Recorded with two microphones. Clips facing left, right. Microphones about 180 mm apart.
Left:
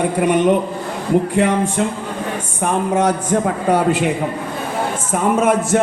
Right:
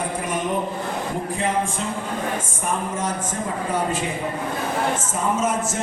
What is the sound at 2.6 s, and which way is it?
A man's voice, 70° left (ahead or behind).